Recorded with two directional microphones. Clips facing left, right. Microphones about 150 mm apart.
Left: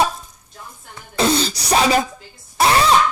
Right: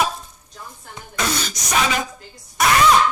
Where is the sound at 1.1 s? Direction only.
30° left (ahead or behind).